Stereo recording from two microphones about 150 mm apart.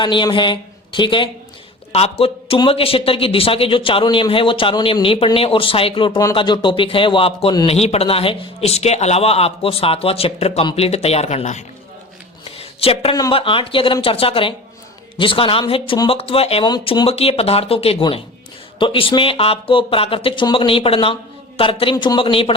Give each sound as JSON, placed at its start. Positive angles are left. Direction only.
{"t": 0.0, "sound": "a man's voice", "side_deg": 30}
{"t": 12.5, "sound": "a sound", "side_deg": 40}
{"t": 13.3, "sound": "speech", "side_deg": 35}